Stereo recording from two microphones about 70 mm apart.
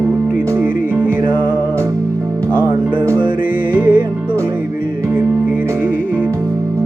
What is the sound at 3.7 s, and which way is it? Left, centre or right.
Music, right.